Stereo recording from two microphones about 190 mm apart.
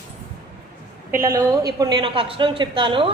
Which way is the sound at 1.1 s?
15° right (ahead or behind).